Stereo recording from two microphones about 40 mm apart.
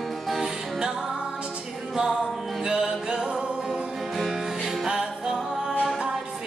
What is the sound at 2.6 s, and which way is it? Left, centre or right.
Music, centre.